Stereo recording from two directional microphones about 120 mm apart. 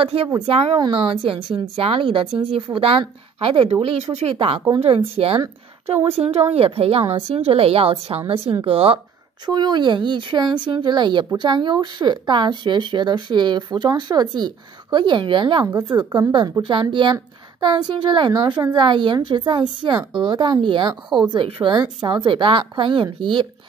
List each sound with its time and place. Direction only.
0.0 s speech: 50° right (ahead or behind)
0.7 s speech: 45° right (ahead or behind)
3.8 s speech: 60° right (ahead or behind)
4.3 s speech: 50° right (ahead or behind)
9.5 s speech: 35° right (ahead or behind)